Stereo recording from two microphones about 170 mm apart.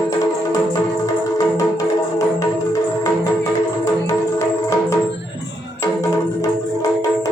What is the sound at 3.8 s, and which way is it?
Music, 15° left (ahead or behind).